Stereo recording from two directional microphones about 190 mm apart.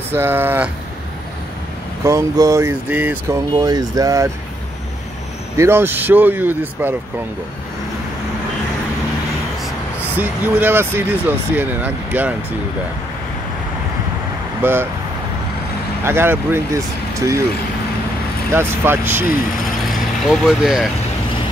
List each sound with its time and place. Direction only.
0.1 s speech: 10° right (ahead or behind)
2.0 s speech: 15° right (ahead or behind)
3.5 s speech: 20° right (ahead or behind)
5.6 s speech: 10° right (ahead or behind)
10.1 s speech: 10° right (ahead or behind)
14.6 s speech: 10° right (ahead or behind)
16.0 s speech: 10° right (ahead or behind)
18.5 s speech: 10° right (ahead or behind)